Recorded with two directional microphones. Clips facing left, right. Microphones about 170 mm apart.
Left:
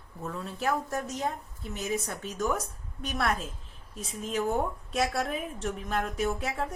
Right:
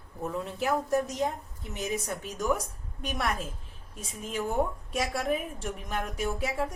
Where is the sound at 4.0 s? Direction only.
10° right (ahead or behind).